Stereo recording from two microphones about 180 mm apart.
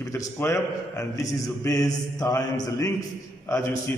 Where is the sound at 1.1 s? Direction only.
20° left (ahead or behind).